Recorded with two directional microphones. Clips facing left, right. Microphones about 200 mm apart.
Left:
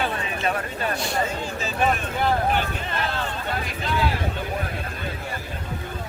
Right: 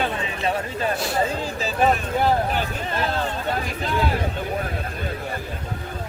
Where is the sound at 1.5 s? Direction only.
35° right (ahead or behind).